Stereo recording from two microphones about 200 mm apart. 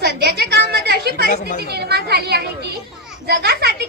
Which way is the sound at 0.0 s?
55° right (ahead or behind).